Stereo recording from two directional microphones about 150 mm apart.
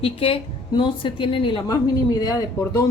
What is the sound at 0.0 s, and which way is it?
A woman's voice, 40° left (ahead or behind).